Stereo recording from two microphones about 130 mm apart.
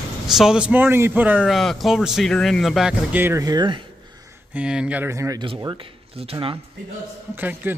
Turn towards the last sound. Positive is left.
turn(degrees=-15)  # may be behind; listen again after turning